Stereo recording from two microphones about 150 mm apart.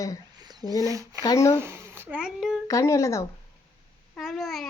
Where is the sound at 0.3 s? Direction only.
25° right (ahead or behind).